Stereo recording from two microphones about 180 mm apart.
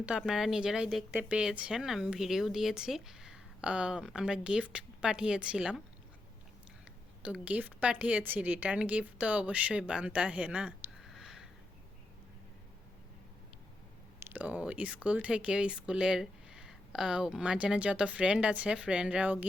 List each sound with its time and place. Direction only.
0.0 s speech: 5° right (ahead or behind)
7.2 s a woman's voice: 5° right (ahead or behind)
11.0 s sniff: centre (ahead or behind)
14.2 s speech: 10° right (ahead or behind)